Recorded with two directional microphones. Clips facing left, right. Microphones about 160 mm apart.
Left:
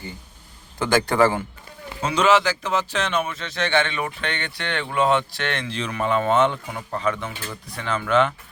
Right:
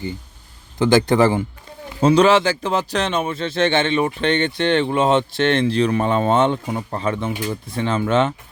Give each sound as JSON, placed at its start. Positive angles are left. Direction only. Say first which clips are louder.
{"t": 0.8, "sound": "speech", "louder": "right 4 dB", "side_deg": -20}
{"t": 2.0, "sound": "speech", "louder": "right 6 dB", "side_deg": -35}